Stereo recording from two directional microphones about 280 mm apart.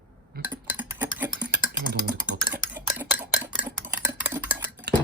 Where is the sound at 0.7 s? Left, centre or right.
Centre.